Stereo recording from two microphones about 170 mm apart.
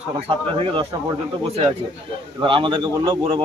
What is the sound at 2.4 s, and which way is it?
Speech, 30° right (ahead or behind).